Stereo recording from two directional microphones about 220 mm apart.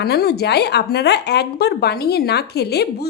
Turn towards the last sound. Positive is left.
turn(degrees=45)  # may be behind; listen again after turning